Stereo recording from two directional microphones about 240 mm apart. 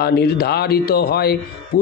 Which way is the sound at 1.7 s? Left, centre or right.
Left.